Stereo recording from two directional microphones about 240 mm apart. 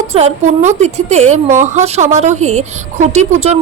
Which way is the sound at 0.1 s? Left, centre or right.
Right.